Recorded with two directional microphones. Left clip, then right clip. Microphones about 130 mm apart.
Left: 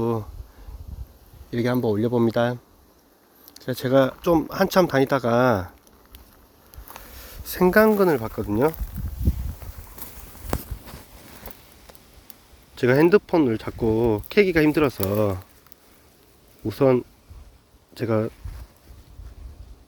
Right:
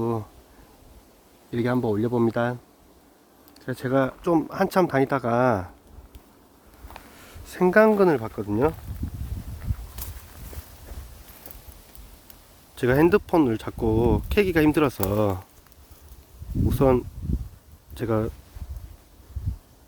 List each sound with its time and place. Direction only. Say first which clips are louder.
0.0 s a sound: left 2 dB; 15° left (ahead or behind)
1.5 s speech: left 2 dB; 10° left (ahead or behind)
7.3 s a sound: left 2 dB; 25° left (ahead or behind)
7.7 s speech: even; centre (ahead or behind)
12.7 s speech: left 2 dB; 5° right (ahead or behind)
16.6 s speech: left 2 dB; 5° right (ahead or behind)